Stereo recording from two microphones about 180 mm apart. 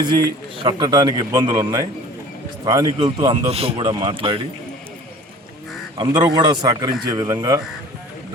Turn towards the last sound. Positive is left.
turn(degrees=-20)  # may be behind; listen again after turning